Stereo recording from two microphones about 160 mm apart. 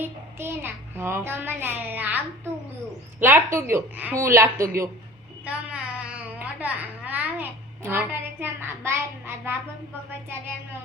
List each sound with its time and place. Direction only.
0.0 s a child's voice: 15° right (ahead or behind)
5.5 s babbling: 10° right (ahead or behind)